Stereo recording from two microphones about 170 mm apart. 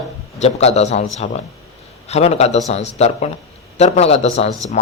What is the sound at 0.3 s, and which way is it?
Speech, 40° left (ahead or behind).